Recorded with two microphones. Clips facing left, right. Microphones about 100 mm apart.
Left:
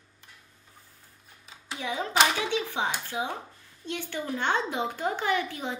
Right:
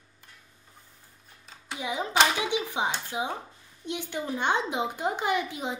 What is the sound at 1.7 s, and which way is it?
Speech, 15° right (ahead or behind).